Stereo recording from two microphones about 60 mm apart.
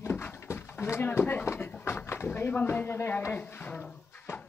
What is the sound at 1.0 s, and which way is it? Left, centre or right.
Speech, left.